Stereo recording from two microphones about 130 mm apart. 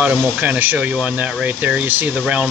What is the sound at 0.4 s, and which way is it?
Speech, 10° right (ahead or behind).